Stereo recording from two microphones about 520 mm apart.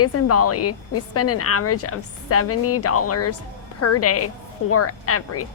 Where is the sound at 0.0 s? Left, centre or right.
Left.